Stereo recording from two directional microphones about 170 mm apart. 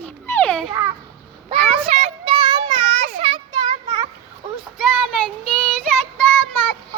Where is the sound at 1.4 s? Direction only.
35° right (ahead or behind).